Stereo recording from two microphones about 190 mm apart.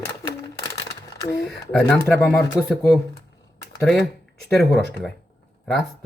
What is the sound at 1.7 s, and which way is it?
Speech, 5° left (ahead or behind).